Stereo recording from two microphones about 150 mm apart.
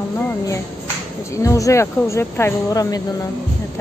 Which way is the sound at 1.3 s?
20° left (ahead or behind).